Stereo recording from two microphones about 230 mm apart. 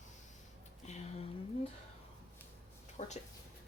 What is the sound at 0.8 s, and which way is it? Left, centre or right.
Speech, left.